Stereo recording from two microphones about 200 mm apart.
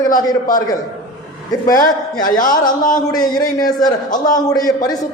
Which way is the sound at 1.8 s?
40° left (ahead or behind).